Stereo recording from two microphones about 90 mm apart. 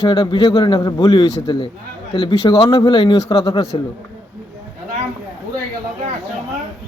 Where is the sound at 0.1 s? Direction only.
65° left (ahead or behind).